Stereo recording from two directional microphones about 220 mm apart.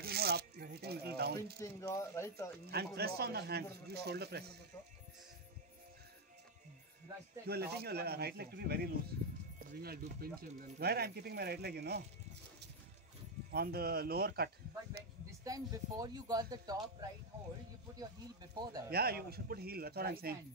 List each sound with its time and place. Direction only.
0.0 s rub: 45° right (ahead or behind)
1.6 s speech: 15° left (ahead or behind)
2.6 s speech: 45° right (ahead or behind)
7.4 s speech: 45° right (ahead or behind)
13.5 s speech: 45° right (ahead or behind)
15.4 s speech: 15° right (ahead or behind)
18.6 s speech: 20° right (ahead or behind)
18.9 s speech: 45° right (ahead or behind)